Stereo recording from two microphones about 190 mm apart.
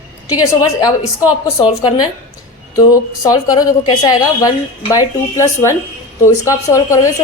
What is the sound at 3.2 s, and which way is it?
A woman's voice, 20° left (ahead or behind).